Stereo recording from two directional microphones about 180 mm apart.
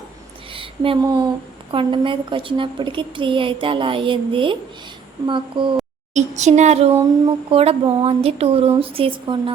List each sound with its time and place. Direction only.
0.5 s a woman's voice: 30° right (ahead or behind)
6.1 s speech: 40° right (ahead or behind)